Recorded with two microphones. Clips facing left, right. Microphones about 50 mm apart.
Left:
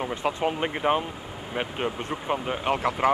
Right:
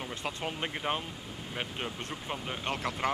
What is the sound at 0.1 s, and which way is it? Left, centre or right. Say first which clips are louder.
Speech: left 10 dB; centre.